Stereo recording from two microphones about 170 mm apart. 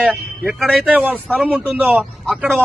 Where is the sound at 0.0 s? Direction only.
5° right (ahead or behind).